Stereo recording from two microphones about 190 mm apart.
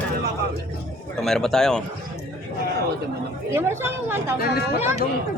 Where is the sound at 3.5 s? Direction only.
10° right (ahead or behind).